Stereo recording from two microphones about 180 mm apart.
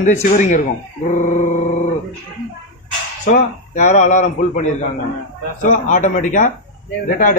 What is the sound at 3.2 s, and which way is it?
A man's voice, 40° left (ahead or behind).